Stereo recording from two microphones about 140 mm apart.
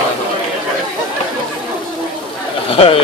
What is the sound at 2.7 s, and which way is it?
Speech, 40° left (ahead or behind).